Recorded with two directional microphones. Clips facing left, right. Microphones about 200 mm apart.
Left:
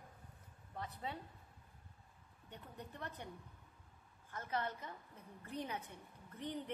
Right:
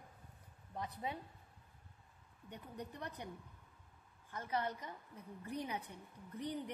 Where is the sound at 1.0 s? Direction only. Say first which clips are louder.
Right 2 dB; 15° right (ahead or behind).